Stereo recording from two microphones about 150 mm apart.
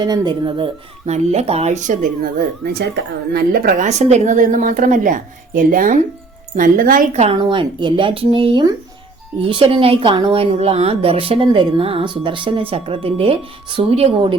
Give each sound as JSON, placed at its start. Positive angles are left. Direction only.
{"t": 0.0, "sound": "a woman's voice", "side_deg": -30}
{"t": 7.5, "sound": "speech", "side_deg": -30}